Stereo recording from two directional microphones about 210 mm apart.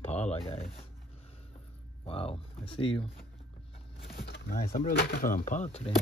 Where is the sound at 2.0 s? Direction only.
25° left (ahead or behind).